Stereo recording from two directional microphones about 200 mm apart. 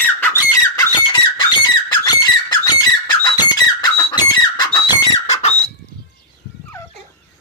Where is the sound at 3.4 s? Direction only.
20° left (ahead or behind).